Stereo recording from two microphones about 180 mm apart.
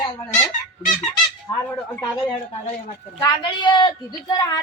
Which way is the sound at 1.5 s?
25° left (ahead or behind).